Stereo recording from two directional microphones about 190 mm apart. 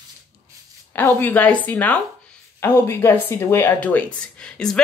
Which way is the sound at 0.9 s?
10° left (ahead or behind).